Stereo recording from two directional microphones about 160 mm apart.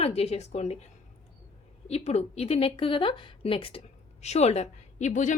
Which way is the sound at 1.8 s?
40° left (ahead or behind).